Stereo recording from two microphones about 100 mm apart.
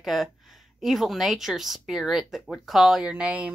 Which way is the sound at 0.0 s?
Centre (ahead or behind).